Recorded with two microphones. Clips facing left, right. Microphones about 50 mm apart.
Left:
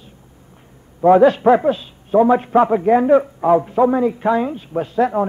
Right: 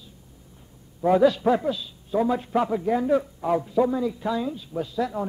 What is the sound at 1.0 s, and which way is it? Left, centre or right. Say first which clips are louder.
A man's voice: left 8 dB; left.